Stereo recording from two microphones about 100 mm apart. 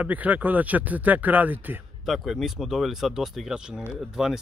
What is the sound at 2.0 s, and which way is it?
Speech, centre (ahead or behind).